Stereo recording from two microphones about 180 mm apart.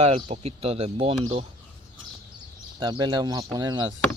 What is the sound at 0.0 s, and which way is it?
Speech, 35° right (ahead or behind).